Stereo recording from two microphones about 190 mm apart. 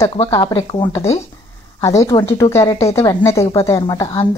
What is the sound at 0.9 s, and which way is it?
A woman's voice, 15° left (ahead or behind).